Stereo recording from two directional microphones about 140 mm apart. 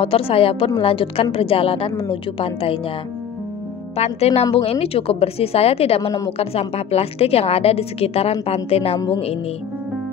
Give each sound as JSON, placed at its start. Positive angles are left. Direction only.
{"t": 0.0, "sound": "a woman's voice", "side_deg": 45}
{"t": 3.9, "sound": "a woman's voice", "side_deg": 50}